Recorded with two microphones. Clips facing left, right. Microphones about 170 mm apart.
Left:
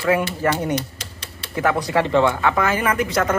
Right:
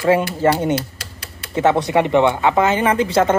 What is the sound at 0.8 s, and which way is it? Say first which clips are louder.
Typewriter: right 1 dB; 10° right (ahead or behind).